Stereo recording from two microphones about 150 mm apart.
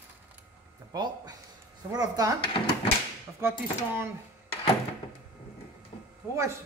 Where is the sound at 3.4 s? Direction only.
15° right (ahead or behind).